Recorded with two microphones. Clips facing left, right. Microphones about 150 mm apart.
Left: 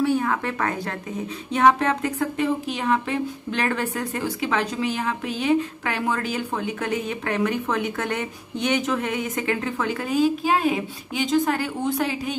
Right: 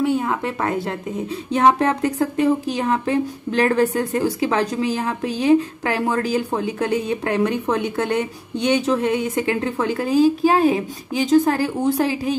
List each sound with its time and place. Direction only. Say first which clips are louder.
0.0 s speech: right 2 dB; 20° right (ahead or behind)
8.8 s speech: right 6 dB; 30° right (ahead or behind)